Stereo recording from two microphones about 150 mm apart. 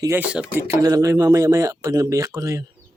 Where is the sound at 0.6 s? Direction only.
20° right (ahead or behind).